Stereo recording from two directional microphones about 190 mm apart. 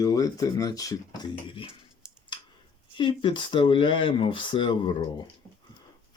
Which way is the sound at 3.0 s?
25° left (ahead or behind).